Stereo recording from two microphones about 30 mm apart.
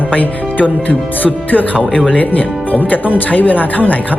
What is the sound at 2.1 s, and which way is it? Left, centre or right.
Speech, left.